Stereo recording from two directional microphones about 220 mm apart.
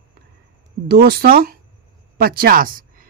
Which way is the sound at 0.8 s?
45° right (ahead or behind).